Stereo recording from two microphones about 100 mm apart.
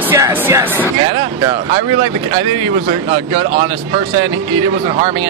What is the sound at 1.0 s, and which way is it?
Speech, 55° right (ahead or behind).